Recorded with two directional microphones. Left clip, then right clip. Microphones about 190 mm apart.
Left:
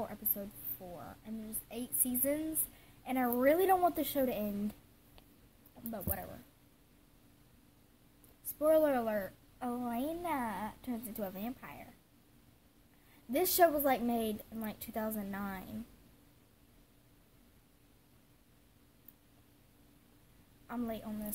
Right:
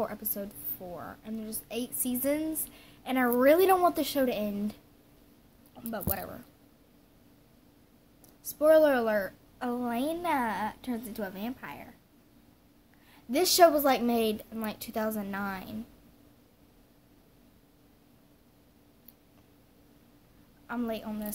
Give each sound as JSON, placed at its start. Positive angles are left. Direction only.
{"t": 0.0, "sound": "a woman's voice", "side_deg": -5}
{"t": 5.9, "sound": "a woman's voice", "side_deg": 0}
{"t": 8.5, "sound": "a woman's voice", "side_deg": 0}
{"t": 13.3, "sound": "a woman's voice", "side_deg": 0}
{"t": 20.6, "sound": "a woman's voice", "side_deg": 5}